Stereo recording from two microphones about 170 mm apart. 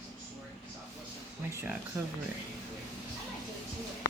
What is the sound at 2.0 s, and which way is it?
Speech, 15° right (ahead or behind).